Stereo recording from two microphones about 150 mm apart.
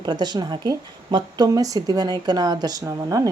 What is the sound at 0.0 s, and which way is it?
A woman's voice, 30° right (ahead or behind).